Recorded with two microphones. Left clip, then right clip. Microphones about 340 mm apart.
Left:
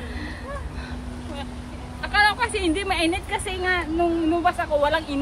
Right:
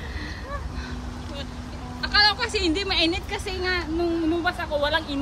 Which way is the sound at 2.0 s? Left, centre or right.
Centre.